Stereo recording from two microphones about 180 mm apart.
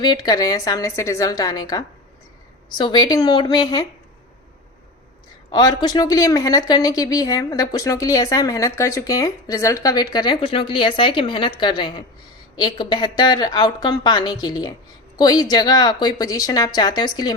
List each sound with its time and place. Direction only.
0.0 s speech: 25° left (ahead or behind)
5.5 s speech: 25° left (ahead or behind)